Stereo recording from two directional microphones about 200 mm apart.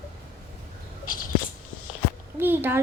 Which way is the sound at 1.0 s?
45° left (ahead or behind).